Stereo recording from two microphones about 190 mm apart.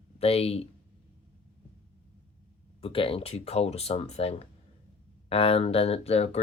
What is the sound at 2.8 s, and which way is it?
Speech, 30° left (ahead or behind).